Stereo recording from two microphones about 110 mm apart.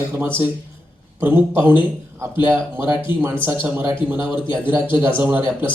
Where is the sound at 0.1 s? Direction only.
20° right (ahead or behind).